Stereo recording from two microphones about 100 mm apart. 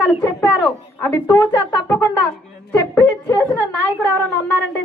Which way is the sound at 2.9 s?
30° left (ahead or behind).